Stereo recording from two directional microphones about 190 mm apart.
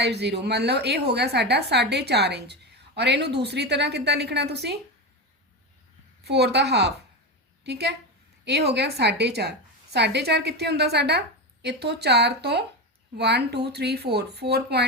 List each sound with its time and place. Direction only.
0.0 s a woman's voice: 60° right (ahead or behind)
6.2 s a woman's voice: 60° right (ahead or behind)